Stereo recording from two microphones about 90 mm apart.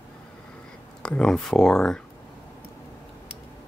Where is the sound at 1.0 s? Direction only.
10° left (ahead or behind).